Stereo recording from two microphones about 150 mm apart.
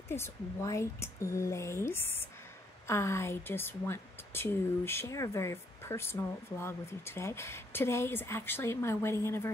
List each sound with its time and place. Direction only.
0.1 s a woman's voice: 20° left (ahead or behind)